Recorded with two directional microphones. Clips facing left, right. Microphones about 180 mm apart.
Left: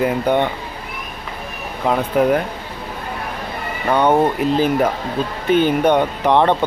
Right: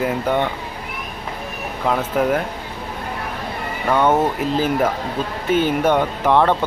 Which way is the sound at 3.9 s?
15° left (ahead or behind).